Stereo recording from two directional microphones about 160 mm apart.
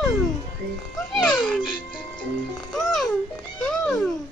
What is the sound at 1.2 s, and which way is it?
Speech, 5° left (ahead or behind).